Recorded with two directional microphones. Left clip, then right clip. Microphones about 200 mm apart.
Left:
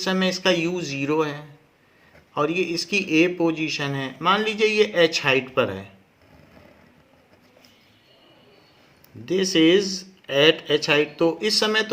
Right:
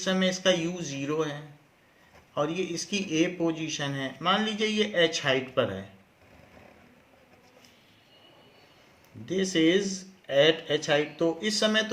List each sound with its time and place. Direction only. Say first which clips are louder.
0.0 s a man's voice: left 4 dB; 40° left (ahead or behind)
9.2 s speech: left 6 dB; 45° left (ahead or behind)